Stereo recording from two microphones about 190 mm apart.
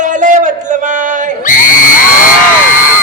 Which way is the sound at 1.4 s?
45° left (ahead or behind).